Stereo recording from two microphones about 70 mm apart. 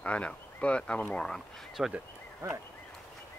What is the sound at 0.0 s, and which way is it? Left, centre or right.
Speech, centre.